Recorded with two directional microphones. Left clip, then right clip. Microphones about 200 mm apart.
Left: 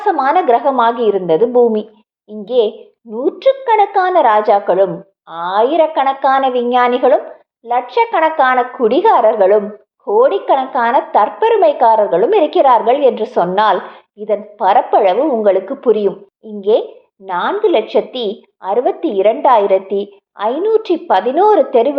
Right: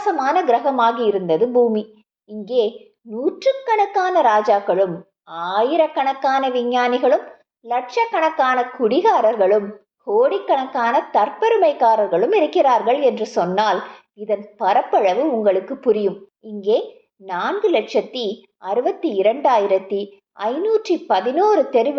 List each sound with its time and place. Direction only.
0.0 s a woman's voice: 15° left (ahead or behind)